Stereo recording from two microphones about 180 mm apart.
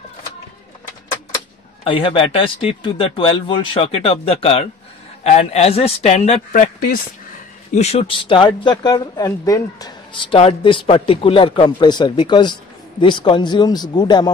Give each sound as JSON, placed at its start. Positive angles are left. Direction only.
{"t": 1.9, "sound": "a man's voice", "side_deg": 30}
{"t": 6.5, "sound": "speech", "side_deg": 50}
{"t": 7.7, "sound": "speech", "side_deg": 35}